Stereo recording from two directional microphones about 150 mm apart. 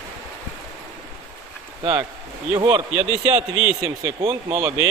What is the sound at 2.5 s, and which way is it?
Speech, 30° right (ahead or behind).